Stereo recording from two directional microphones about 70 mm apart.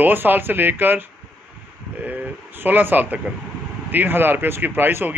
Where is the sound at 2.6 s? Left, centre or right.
Right.